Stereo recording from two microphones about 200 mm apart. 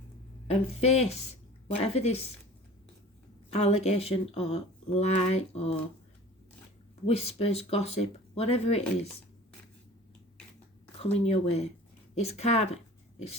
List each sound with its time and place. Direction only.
0.4 s speech: 30° left (ahead or behind)
3.5 s speech: 30° left (ahead or behind)
7.0 s speech: 30° left (ahead or behind)
11.0 s speech: 30° left (ahead or behind)